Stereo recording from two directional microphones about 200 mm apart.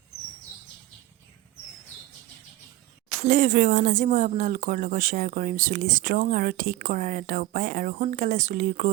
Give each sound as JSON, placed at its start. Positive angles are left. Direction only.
{"t": 3.2, "sound": "speech", "side_deg": -40}